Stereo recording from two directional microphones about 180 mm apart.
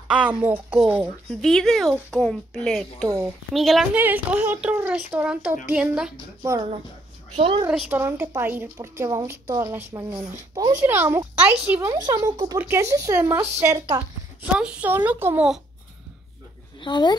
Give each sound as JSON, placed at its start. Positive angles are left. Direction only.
{"t": 0.1, "sound": "speech", "side_deg": -5}
{"t": 3.1, "sound": "speech", "side_deg": -20}
{"t": 3.5, "sound": "speech", "side_deg": 0}
{"t": 7.3, "sound": "a woman's voice", "side_deg": -35}
{"t": 7.9, "sound": "speech", "side_deg": -15}
{"t": 12.1, "sound": "speech", "side_deg": -20}
{"t": 14.4, "sound": "speech", "side_deg": -5}
{"t": 16.8, "sound": "speech", "side_deg": 25}